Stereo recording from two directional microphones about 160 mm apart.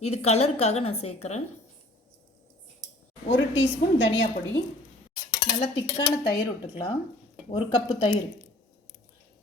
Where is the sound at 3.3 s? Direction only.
30° left (ahead or behind).